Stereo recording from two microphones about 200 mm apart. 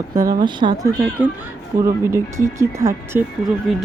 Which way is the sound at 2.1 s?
15° right (ahead or behind).